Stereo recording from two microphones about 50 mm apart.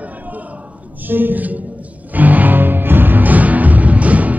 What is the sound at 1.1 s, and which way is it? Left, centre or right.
Speech, right.